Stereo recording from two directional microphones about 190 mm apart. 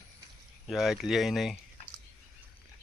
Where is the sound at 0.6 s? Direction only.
Centre (ahead or behind).